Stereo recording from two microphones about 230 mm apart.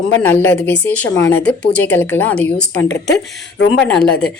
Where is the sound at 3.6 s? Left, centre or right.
Left.